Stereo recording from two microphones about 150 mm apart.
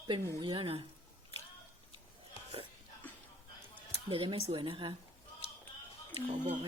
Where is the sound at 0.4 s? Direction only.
35° right (ahead or behind).